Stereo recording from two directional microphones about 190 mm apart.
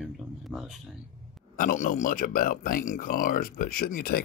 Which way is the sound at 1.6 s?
45° left (ahead or behind).